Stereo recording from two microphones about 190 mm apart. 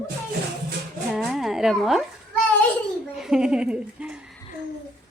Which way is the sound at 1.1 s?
Centre (ahead or behind).